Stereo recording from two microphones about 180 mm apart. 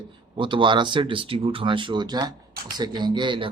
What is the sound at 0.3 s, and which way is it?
Speech, 25° right (ahead or behind).